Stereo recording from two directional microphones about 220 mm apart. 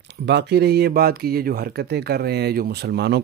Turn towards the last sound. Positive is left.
turn(degrees=-50)  # may be behind; listen again after turning